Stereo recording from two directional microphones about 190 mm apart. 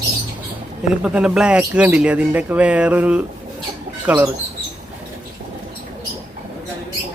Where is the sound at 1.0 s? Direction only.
5° right (ahead or behind).